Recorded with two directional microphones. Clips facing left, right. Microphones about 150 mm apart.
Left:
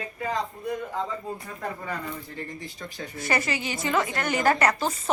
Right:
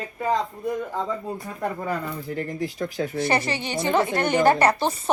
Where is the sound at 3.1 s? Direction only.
30° right (ahead or behind).